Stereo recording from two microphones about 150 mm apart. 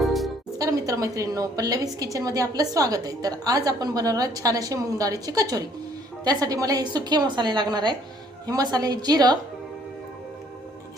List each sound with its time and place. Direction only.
0.0 s music: centre (ahead or behind)
0.6 s a woman's voice: 20° right (ahead or behind)